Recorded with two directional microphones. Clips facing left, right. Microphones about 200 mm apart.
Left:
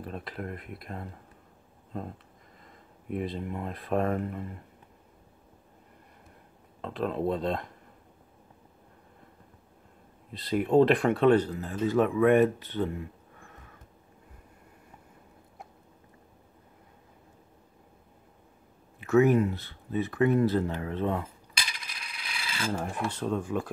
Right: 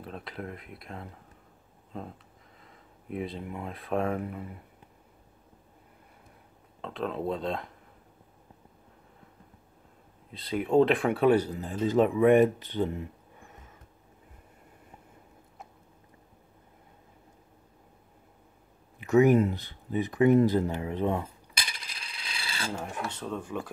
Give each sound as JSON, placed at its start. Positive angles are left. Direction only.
{"t": 0.0, "sound": "speech", "side_deg": 0}
{"t": 3.1, "sound": "speech", "side_deg": 0}
{"t": 6.8, "sound": "speech", "side_deg": 0}
{"t": 10.3, "sound": "speech", "side_deg": 0}
{"t": 18.9, "sound": "speech", "side_deg": -15}
{"t": 22.0, "sound": "filing", "side_deg": -30}
{"t": 22.7, "sound": "speech", "side_deg": 5}